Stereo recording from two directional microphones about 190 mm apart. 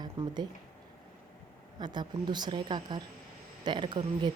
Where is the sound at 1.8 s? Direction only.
25° right (ahead or behind).